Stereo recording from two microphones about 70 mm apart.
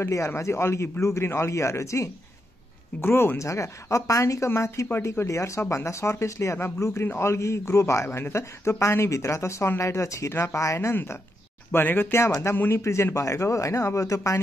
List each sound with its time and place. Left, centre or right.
0.0 s speech: left
3.0 s speech: left
3.3 s speech: left